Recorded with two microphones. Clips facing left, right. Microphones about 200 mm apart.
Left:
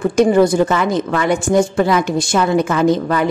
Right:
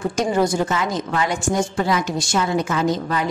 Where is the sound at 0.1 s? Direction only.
60° left (ahead or behind).